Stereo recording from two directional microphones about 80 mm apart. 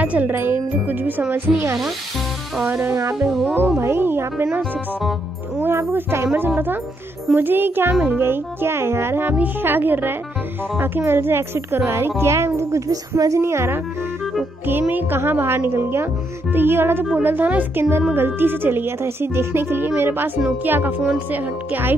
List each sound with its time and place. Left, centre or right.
0.0 s a child's voice: centre
1.3 s a woman's voice: right
5.6 s a child's voice: right